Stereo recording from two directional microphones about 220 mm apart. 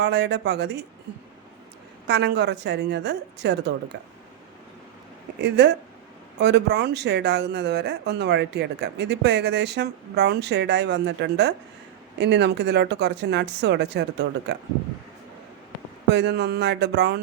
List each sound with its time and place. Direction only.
0.0 s speech: 50° right (ahead or behind)
2.0 s speech: 50° right (ahead or behind)
5.4 s speech: 50° right (ahead or behind)
16.0 s speech: 50° right (ahead or behind)